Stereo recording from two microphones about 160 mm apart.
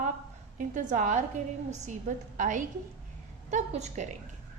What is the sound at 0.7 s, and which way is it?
A woman's voice, 50° right (ahead or behind).